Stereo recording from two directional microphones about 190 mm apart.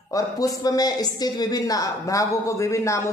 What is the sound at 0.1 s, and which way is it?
Speech, 20° left (ahead or behind).